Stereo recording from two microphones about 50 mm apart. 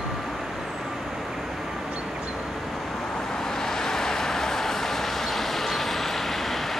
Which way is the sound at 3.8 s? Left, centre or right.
Centre.